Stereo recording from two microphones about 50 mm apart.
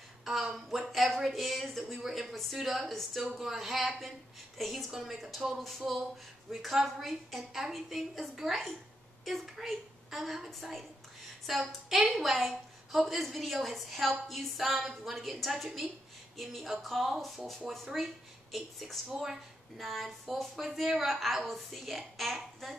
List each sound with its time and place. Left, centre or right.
0.2 s a woman's voice: centre